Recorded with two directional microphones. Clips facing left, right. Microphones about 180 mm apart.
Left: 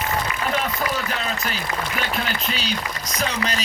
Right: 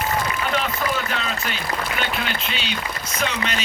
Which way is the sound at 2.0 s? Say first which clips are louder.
Even; 40° left (ahead or behind).